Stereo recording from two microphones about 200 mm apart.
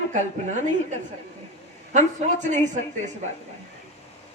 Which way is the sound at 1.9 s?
35° right (ahead or behind).